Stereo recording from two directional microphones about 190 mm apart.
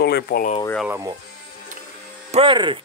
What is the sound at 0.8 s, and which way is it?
Speech, 15° right (ahead or behind).